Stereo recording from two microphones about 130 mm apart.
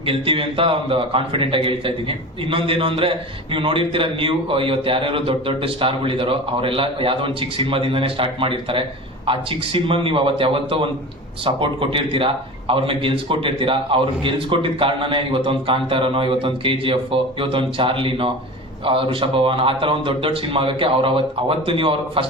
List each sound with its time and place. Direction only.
0.0 s a man's voice: 45° right (ahead or behind)